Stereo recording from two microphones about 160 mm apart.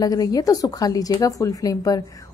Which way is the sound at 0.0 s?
25° left (ahead or behind).